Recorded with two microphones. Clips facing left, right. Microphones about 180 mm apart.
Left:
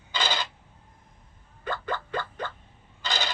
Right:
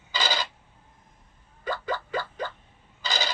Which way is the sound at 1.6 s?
10° right (ahead or behind).